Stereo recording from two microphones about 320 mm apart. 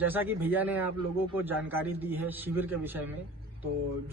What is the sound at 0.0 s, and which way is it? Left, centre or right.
A man's voice, centre.